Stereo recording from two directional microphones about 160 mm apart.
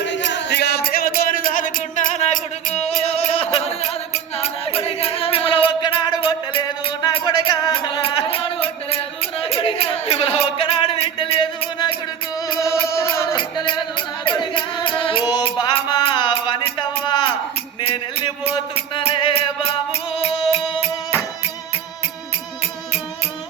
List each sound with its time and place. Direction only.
0.0 s music: 90° left; by 11.9 s 30° left (ahead or behind)
12.5 s music: 20° left (ahead or behind); by 20.9 s 40° left (ahead or behind)
22.6 s music: 40° left (ahead or behind)